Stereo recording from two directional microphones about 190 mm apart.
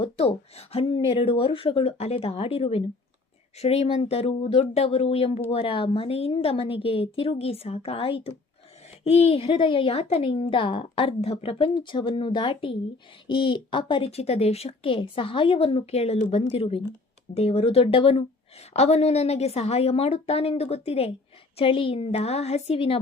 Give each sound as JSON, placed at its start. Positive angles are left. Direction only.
{"t": 0.0, "sound": "a woman's voice", "side_deg": 30}